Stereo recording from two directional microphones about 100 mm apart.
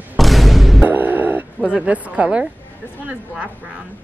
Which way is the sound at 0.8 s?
15° right (ahead or behind).